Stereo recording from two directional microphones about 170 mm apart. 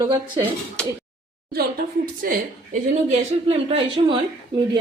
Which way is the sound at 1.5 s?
65° right (ahead or behind).